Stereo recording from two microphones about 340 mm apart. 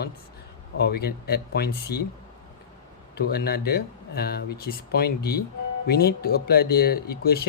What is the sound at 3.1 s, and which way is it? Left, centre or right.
Speech, left.